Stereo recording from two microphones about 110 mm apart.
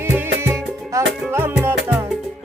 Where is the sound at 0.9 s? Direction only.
25° right (ahead or behind).